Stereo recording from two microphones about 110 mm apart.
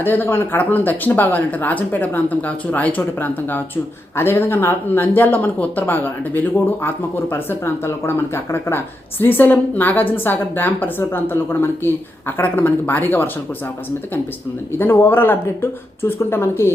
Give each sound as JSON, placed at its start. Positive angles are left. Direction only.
{"t": 0.0, "sound": "speech", "side_deg": 20}
{"t": 14.8, "sound": "speech", "side_deg": 20}